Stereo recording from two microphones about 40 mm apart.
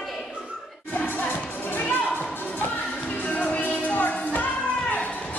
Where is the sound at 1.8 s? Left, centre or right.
Left.